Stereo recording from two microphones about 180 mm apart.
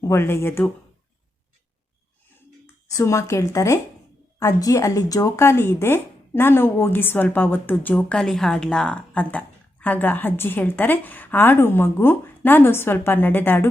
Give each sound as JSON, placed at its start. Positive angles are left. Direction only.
{"t": 0.0, "sound": "speech", "side_deg": 15}
{"t": 2.9, "sound": "speech", "side_deg": 15}